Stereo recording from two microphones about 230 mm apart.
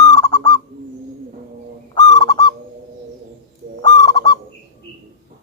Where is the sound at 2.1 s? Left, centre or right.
Centre.